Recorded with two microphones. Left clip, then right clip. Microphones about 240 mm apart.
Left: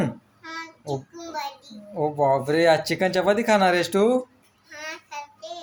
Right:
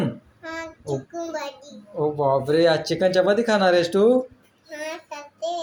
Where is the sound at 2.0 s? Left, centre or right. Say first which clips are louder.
Even; left.